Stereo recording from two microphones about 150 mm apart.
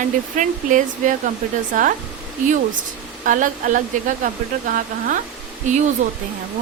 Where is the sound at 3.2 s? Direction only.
60° right (ahead or behind).